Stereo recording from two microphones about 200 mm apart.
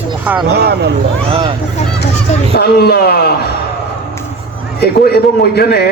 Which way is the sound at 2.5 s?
50° left (ahead or behind).